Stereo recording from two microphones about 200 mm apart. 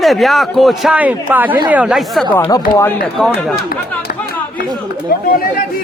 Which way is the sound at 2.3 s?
15° left (ahead or behind).